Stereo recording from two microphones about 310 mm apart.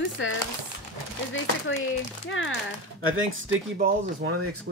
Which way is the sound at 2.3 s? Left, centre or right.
Left.